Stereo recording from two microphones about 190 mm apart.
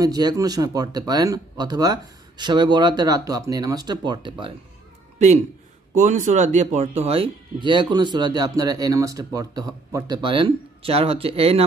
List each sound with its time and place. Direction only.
0.0 s speech: 20° right (ahead or behind)
5.9 s speech: 40° right (ahead or behind)